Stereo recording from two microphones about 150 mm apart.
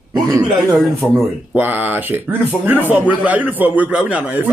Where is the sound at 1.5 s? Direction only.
10° right (ahead or behind).